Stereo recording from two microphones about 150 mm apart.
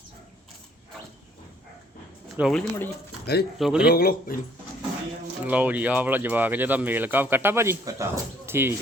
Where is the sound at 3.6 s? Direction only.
Centre (ahead or behind).